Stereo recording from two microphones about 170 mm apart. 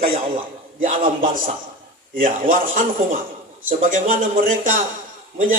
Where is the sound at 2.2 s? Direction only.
50° right (ahead or behind).